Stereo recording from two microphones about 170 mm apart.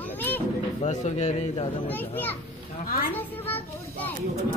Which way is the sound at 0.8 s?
40° left (ahead or behind).